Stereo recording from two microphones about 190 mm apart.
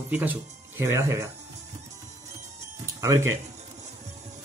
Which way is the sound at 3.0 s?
15° right (ahead or behind).